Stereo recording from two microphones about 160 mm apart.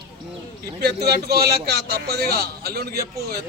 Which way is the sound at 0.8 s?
85° right.